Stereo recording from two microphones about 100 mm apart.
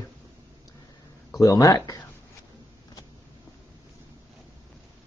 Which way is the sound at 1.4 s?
35° left (ahead or behind).